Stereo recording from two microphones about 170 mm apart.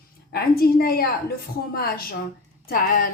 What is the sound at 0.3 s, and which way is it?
Speech, 65° left (ahead or behind).